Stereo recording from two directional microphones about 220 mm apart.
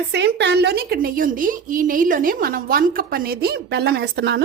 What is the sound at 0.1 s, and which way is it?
A woman's voice, 50° right (ahead or behind).